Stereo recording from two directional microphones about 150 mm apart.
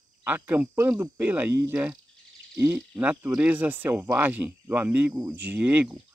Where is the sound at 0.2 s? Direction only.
10° right (ahead or behind).